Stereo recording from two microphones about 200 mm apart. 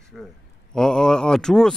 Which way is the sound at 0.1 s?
Centre (ahead or behind).